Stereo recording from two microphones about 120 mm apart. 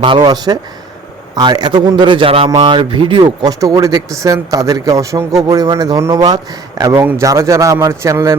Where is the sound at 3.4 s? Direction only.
30° right (ahead or behind).